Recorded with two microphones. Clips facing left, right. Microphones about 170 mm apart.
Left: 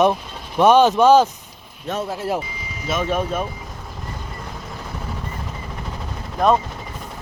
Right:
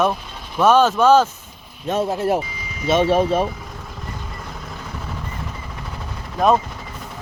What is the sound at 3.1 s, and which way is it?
Speech, 35° right (ahead or behind).